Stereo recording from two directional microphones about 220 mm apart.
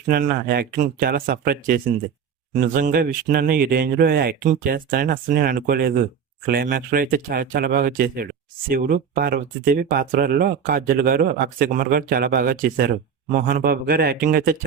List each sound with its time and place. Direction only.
0.1 s speech: 40° right (ahead or behind)